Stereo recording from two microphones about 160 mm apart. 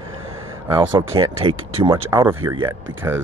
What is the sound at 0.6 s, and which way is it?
Speech, 20° right (ahead or behind).